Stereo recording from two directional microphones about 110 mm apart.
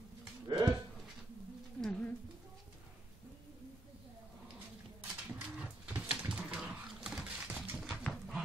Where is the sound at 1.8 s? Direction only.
5° left (ahead or behind).